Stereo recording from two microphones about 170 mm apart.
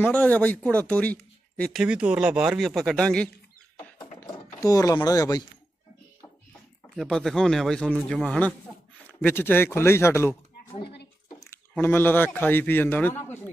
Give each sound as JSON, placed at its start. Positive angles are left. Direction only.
{"t": 0.0, "sound": "speech", "side_deg": 10}
{"t": 4.0, "sound": "a sound", "side_deg": 20}
{"t": 7.0, "sound": "speech", "side_deg": 0}